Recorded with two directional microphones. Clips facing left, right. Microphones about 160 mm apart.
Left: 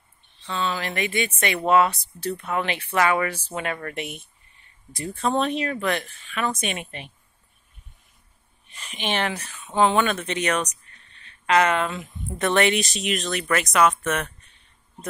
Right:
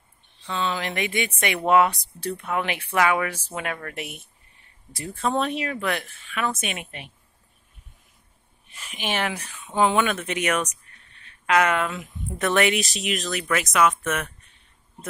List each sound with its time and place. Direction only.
0.5 s speech: 15° right (ahead or behind)
8.7 s speech: 5° right (ahead or behind)